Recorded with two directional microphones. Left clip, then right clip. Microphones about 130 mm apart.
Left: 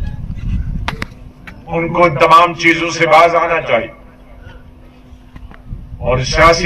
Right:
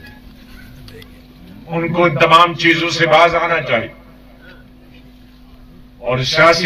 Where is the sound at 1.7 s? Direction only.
10° left (ahead or behind).